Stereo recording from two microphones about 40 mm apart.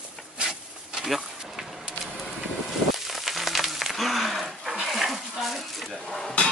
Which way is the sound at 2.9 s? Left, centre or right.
Centre.